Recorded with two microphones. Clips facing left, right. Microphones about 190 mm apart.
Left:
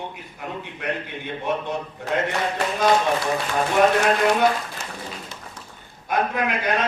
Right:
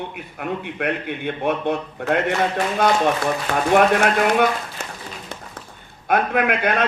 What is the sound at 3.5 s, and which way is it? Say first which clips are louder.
Speech: right 1 dB; 60° right (ahead or behind).